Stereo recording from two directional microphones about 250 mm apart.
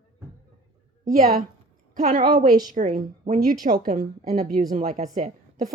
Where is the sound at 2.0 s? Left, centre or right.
Right.